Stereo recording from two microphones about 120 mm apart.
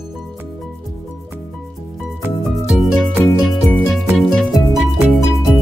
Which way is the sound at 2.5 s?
Centre (ahead or behind).